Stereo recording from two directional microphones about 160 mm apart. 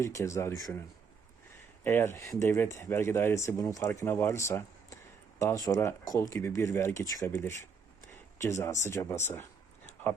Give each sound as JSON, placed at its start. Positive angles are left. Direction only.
{"t": 0.0, "sound": "speech", "side_deg": 20}
{"t": 1.8, "sound": "speech", "side_deg": 15}